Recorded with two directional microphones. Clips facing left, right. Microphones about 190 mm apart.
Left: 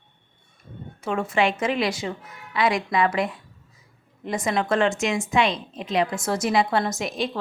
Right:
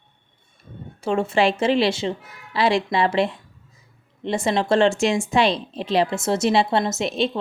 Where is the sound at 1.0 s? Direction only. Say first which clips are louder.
Right 3 dB; 30° right (ahead or behind).